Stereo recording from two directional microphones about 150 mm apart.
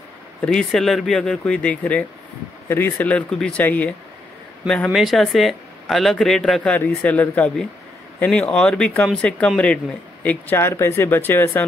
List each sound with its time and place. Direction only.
0.4 s speech: 5° left (ahead or behind)